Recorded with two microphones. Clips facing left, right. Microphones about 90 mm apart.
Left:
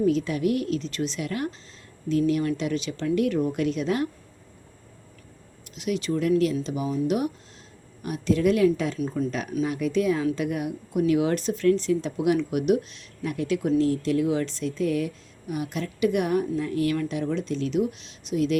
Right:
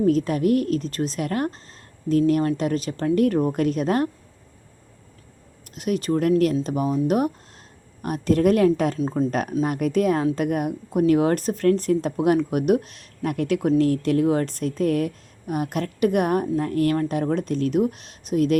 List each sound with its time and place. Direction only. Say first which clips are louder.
0.0 s speech: right 3 dB; 45° right (ahead or behind)
5.7 s speech: right 4 dB; 45° right (ahead or behind)
9.0 s speech: right 4 dB; 30° right (ahead or behind)
9.3 s speech: right 4 dB; 50° right (ahead or behind)